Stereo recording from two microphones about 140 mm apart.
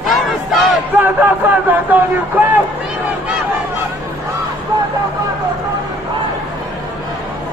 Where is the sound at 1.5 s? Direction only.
10° right (ahead or behind).